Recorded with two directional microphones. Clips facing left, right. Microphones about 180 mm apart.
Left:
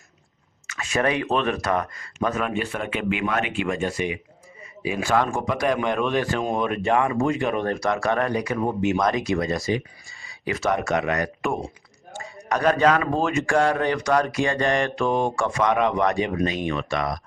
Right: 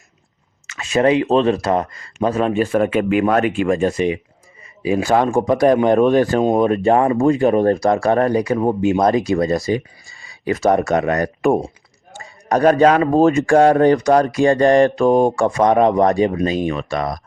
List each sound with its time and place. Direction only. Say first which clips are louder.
0.7 s speech: right 8 dB; 25° right (ahead or behind)